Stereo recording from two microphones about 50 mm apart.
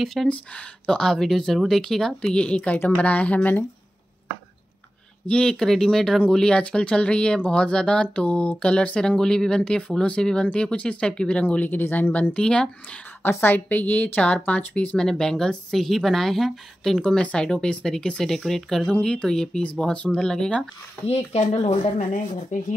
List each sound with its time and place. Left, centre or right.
0.0 s speech: centre
2.3 s speech: left
5.2 s speech: centre
11.4 s a woman's voice: left
12.4 s speech: centre
13.2 s a woman's voice: left
15.0 s speech: centre
17.0 s speech: left
19.2 s speech: centre
19.6 s speech: left